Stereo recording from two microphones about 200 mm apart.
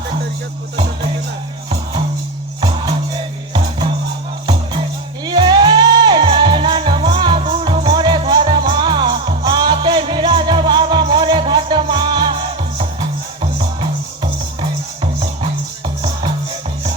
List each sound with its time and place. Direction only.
5.2 s music: 20° right (ahead or behind)